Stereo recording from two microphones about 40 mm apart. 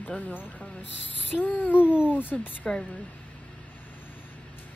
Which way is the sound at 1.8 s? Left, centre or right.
Right.